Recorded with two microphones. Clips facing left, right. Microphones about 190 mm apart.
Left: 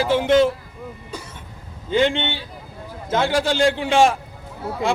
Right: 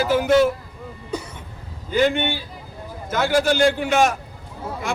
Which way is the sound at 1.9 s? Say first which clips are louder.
Even; 25° left (ahead or behind).